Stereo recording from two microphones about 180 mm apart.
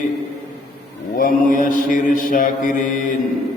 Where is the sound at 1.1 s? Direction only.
50° left (ahead or behind).